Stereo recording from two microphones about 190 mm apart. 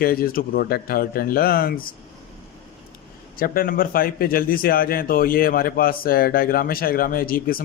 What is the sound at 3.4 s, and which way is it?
A man's voice, 50° left (ahead or behind).